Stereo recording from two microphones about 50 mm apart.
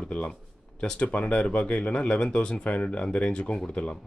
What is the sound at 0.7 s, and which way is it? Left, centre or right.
Speech, centre.